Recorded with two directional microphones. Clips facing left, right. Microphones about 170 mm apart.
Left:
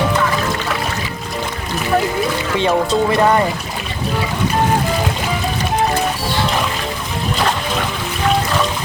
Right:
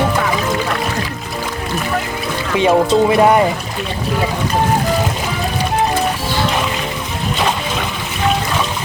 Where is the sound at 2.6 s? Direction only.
15° right (ahead or behind).